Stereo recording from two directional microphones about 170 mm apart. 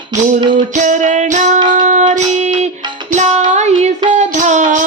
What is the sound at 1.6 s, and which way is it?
Child singing, 30° right (ahead or behind).